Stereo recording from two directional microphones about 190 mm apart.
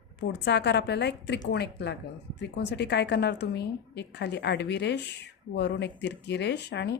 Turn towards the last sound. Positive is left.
turn(degrees=65)  # may be behind; listen again after turning